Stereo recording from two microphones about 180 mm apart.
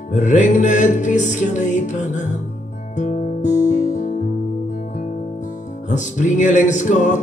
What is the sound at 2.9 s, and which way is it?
Guitar, 40° left (ahead or behind).